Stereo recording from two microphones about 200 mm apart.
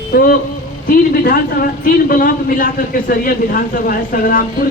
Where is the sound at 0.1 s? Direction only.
50° left (ahead or behind).